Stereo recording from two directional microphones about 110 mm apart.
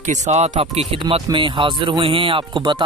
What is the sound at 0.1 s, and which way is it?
Speech, 90° right.